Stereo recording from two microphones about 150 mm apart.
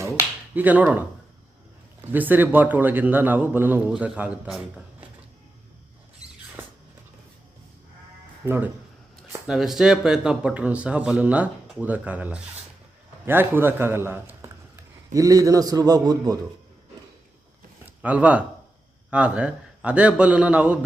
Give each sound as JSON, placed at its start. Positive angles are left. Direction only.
{"t": 0.0, "sound": "finger snapping", "side_deg": -15}
{"t": 2.0, "sound": "a man's voice", "side_deg": -10}
{"t": 8.4, "sound": "a man's voice", "side_deg": -15}
{"t": 9.5, "sound": "a man's voice", "side_deg": 0}
{"t": 17.8, "sound": "a man's voice", "side_deg": -10}